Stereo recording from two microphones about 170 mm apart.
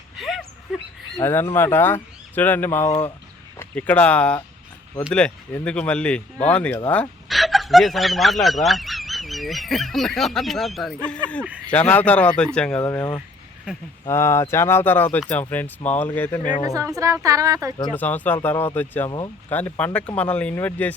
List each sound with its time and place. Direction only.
0.2 s a sound: centre (ahead or behind)
1.2 s speech: 10° left (ahead or behind)
12.8 s speech: 20° left (ahead or behind)
16.6 s a woman's voice: 20° right (ahead or behind)
17.9 s speech: 10° left (ahead or behind)